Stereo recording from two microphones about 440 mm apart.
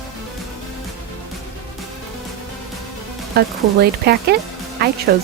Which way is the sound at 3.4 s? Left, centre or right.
Right.